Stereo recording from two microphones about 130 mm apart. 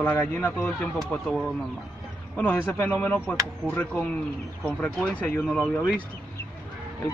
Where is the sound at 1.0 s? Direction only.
Centre (ahead or behind).